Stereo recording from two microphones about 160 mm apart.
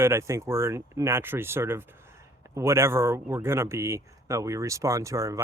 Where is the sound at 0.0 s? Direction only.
15° right (ahead or behind).